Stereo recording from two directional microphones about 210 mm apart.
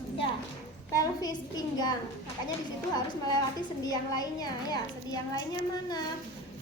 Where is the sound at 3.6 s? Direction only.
20° left (ahead or behind).